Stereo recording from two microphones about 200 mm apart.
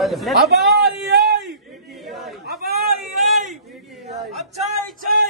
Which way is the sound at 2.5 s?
50° right (ahead or behind).